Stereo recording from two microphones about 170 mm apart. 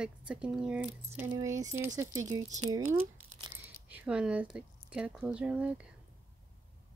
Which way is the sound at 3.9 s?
10° right (ahead or behind).